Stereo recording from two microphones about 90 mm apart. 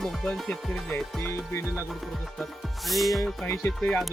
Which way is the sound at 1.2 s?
30° left (ahead or behind).